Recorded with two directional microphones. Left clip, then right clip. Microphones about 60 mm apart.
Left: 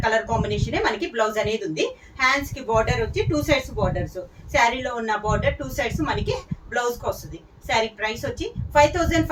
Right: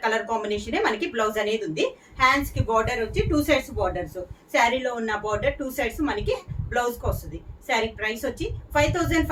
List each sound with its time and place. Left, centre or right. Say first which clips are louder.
0.0 s a woman's voice: left 3 dB; right